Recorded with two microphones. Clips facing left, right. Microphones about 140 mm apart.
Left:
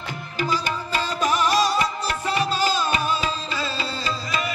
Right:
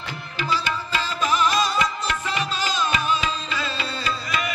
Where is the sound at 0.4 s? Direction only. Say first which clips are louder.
Left 1 dB; 45° left (ahead or behind).